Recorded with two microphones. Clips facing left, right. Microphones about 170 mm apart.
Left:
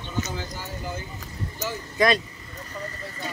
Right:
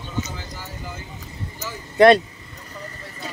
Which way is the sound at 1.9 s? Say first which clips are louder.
Right 9 dB; 65° right (ahead or behind).